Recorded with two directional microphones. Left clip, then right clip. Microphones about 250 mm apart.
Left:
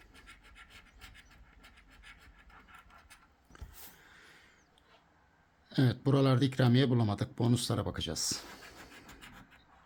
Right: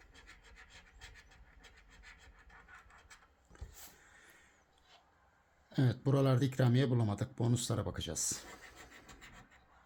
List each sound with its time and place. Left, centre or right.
5.6 s speech: centre